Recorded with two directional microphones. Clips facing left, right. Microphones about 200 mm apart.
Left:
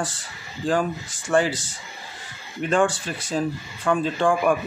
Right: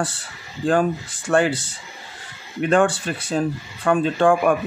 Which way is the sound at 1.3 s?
60° right (ahead or behind).